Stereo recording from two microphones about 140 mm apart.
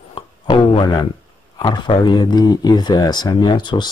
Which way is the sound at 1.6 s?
35° left (ahead or behind).